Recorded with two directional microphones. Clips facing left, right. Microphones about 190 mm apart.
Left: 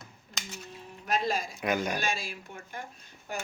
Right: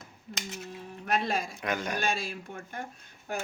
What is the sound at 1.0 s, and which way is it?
Speech, 60° right (ahead or behind).